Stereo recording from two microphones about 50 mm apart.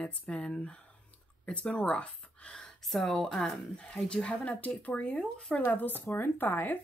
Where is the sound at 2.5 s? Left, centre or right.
Centre.